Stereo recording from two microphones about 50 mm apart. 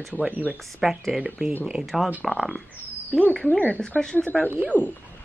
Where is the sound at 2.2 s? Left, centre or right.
Centre.